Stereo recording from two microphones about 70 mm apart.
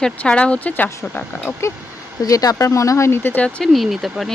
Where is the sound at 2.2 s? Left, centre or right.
Left.